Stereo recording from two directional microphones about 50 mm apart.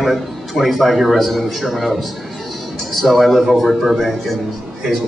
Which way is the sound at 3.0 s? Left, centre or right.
Centre.